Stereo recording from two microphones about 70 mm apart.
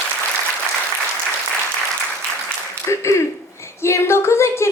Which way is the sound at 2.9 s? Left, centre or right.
Left.